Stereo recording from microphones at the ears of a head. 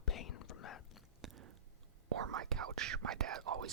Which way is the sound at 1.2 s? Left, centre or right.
Right.